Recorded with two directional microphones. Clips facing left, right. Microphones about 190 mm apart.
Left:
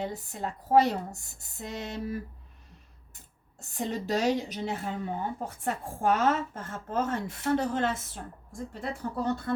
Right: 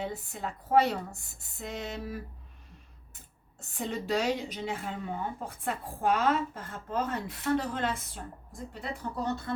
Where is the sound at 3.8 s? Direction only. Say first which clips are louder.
Left 1 dB; 40° left (ahead or behind).